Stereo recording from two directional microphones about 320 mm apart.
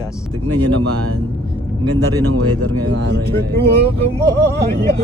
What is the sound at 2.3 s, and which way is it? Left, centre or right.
Speech, right.